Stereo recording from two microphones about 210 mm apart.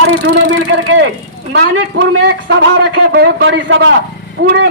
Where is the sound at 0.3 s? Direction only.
65° right (ahead or behind).